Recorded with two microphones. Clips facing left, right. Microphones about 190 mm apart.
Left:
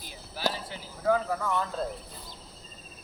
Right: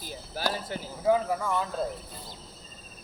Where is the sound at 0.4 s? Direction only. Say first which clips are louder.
Even; 45° right (ahead or behind).